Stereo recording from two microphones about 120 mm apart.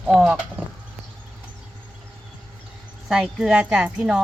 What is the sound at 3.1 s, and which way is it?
A woman's voice, 5° right (ahead or behind).